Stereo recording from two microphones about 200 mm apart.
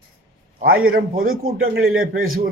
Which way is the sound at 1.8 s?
90° right.